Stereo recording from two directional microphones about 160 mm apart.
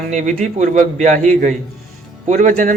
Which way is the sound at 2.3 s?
50° right (ahead or behind).